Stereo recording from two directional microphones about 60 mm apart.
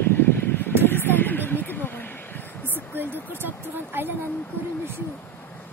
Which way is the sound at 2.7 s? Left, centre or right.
Right.